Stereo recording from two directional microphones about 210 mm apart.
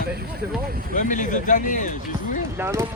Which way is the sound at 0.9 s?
35° left (ahead or behind).